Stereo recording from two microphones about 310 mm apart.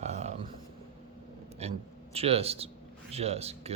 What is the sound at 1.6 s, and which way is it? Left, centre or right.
Speech, centre.